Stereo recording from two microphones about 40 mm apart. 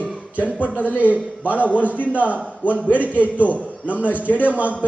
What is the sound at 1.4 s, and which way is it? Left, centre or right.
A man's voice, right.